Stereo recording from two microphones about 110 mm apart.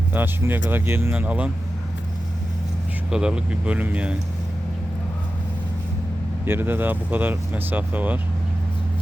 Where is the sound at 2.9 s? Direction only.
5° right (ahead or behind).